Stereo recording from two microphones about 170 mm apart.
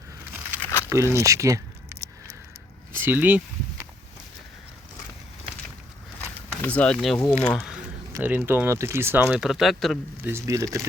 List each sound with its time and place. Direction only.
0.6 s crumpling: 15° left (ahead or behind)
0.9 s speech: 15° right (ahead or behind)
6.1 s a sound: 10° left (ahead or behind)
7.5 s speech: centre (ahead or behind)
8.1 s speech: 10° right (ahead or behind)
10.2 s speech: 15° right (ahead or behind)